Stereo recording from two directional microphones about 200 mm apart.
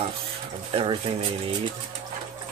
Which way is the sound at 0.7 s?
25° right (ahead or behind).